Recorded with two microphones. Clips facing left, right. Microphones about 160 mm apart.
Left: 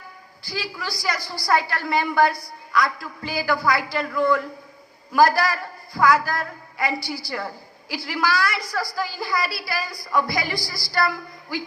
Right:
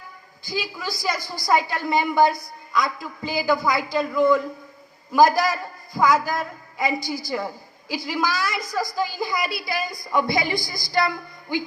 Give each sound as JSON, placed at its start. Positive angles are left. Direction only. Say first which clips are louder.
{"t": 0.4, "sound": "a woman's voice", "louder": "right 2 dB", "side_deg": -20}